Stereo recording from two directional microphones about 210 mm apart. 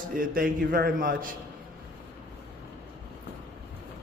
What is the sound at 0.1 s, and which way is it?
A man's voice, 40° right (ahead or behind).